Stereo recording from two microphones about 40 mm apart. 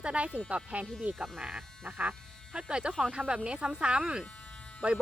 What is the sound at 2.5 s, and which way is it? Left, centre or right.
Speech, right.